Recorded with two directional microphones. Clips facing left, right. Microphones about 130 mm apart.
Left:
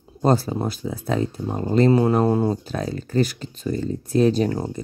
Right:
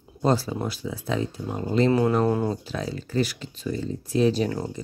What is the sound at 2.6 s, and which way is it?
Speech, 45° left (ahead or behind).